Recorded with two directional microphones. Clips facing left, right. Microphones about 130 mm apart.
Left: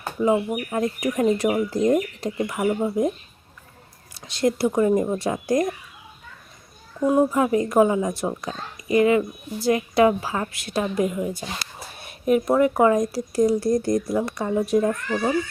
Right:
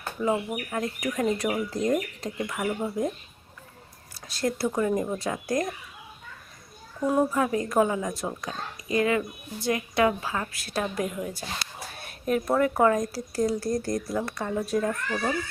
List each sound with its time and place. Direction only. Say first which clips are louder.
0.2 s a woman's voice: left 6 dB; 20° left (ahead or behind)
4.1 s a woman's voice: left 6 dB; 20° left (ahead or behind)
7.3 s a woman's voice: left 5 dB; 20° left (ahead or behind)
11.0 s a woman's voice: left 6 dB; 5° left (ahead or behind); by 15.3 s 20° left (ahead or behind)